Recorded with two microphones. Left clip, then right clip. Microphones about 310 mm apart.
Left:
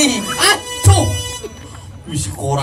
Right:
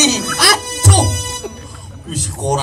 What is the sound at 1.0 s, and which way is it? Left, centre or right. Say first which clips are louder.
Music: right 1 dB; left.